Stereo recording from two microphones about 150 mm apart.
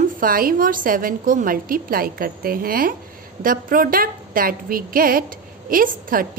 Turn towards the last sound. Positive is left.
turn(degrees=-70)  # may be behind; listen again after turning